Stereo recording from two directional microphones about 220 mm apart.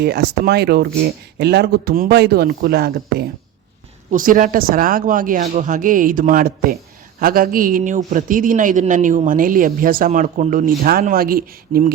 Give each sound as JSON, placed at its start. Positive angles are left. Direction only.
{"t": 0.0, "sound": "a man's voice", "side_deg": -45}